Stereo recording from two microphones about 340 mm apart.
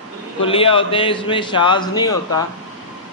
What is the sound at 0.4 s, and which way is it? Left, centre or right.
Speech, centre.